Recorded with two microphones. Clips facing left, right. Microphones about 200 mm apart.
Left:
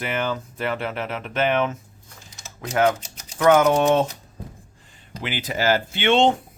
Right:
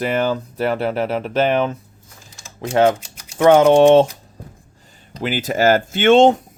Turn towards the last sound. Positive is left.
turn(degrees=-45)  # may be behind; listen again after turning